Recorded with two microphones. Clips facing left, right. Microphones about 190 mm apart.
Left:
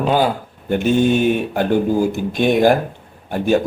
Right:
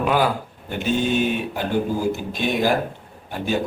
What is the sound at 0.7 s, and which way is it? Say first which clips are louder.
Speech: left 7 dB; 50° left (ahead or behind).